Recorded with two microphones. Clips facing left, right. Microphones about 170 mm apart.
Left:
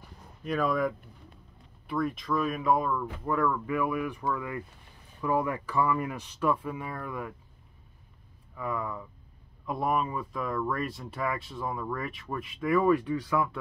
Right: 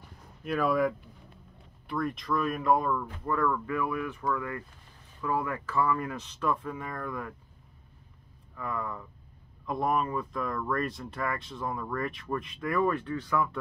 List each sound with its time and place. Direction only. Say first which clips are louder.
0.4 s speech: right 1 dB; 5° right (ahead or behind)
8.5 s speech: left 2 dB; 5° left (ahead or behind)